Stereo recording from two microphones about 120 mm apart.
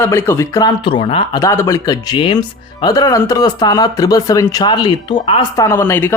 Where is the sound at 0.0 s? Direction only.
20° left (ahead or behind).